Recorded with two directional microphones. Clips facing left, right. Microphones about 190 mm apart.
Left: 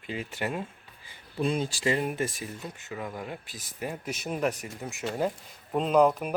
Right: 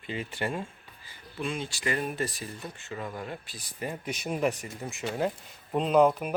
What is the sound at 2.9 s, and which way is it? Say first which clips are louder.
Speech: even; 5° left (ahead or behind).